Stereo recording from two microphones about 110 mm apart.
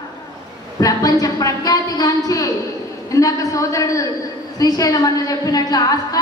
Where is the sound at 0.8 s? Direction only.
35° left (ahead or behind).